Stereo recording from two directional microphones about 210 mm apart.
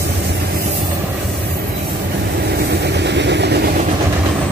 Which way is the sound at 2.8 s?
55° right (ahead or behind).